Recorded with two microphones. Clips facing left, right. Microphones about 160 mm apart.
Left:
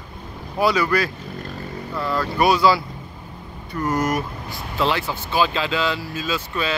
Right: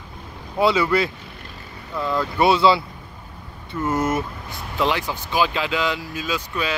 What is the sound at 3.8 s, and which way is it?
Speech, 25° right (ahead or behind).